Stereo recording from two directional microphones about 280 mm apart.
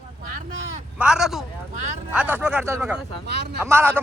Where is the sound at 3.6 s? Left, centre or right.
Centre.